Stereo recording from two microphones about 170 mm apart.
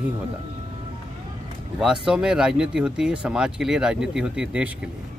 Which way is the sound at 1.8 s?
5° right (ahead or behind).